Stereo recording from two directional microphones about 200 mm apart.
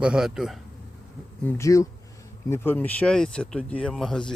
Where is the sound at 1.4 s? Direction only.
15° left (ahead or behind).